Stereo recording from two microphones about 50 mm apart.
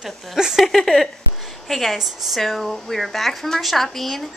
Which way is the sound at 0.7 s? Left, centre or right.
Centre.